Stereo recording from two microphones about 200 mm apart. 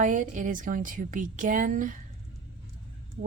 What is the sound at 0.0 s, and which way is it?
A woman's voice, 40° right (ahead or behind).